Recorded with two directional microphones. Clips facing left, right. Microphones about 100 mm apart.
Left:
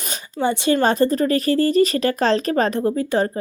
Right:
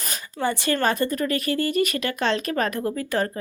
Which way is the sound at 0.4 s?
20° left (ahead or behind).